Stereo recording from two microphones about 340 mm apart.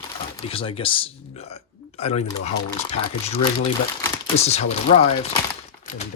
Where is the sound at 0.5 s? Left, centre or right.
Centre.